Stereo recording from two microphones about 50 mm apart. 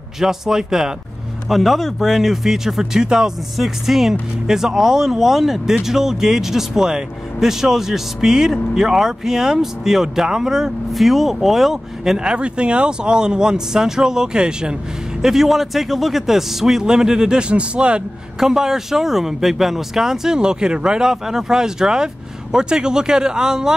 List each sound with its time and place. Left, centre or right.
0.2 s speech: centre
12.4 s speech: right
15.2 s speech: centre; by 18.0 s right
18.4 s speech: centre